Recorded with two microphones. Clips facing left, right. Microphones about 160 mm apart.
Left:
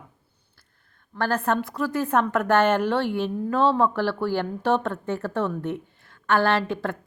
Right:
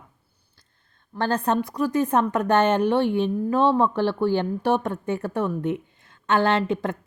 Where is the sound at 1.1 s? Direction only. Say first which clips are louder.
Right 1 dB; 15° right (ahead or behind).